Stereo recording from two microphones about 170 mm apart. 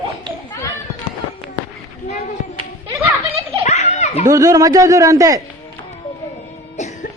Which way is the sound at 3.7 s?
40° left (ahead or behind).